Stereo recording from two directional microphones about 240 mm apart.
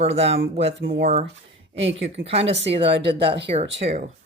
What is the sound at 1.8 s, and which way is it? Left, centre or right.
Speech, right.